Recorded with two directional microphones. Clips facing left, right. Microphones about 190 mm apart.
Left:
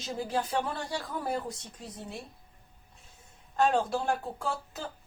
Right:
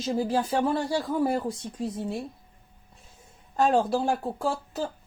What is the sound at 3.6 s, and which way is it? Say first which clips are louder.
Speech: right 4 dB; 35° right (ahead or behind).